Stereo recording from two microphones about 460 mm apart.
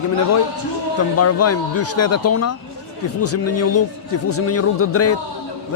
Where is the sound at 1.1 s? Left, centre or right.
Left.